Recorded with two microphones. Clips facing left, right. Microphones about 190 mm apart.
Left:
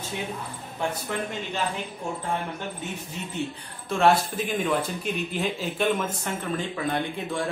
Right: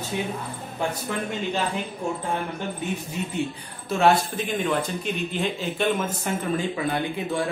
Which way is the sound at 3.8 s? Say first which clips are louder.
Right 1 dB; 5° right (ahead or behind).